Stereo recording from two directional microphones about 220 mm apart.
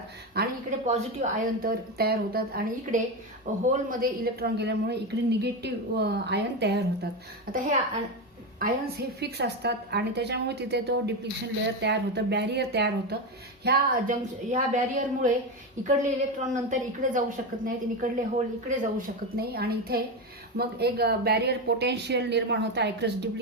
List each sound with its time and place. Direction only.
0.4 s a sound: 45° right (ahead or behind)
0.9 s a woman's voice: 30° right (ahead or behind)
2.0 s speech: 45° right (ahead or behind)
8.5 s speech: 40° right (ahead or behind)
13.7 s a woman's voice: 35° right (ahead or behind)